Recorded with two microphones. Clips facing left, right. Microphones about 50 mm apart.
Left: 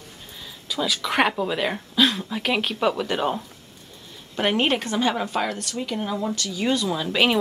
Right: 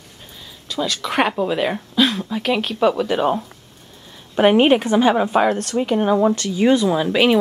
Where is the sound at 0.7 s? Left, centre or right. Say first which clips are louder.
Right 2 dB; centre; by 5.6 s right.